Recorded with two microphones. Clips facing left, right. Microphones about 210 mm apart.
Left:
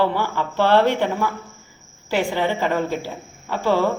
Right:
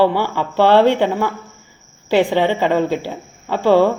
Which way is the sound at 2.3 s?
20° right (ahead or behind).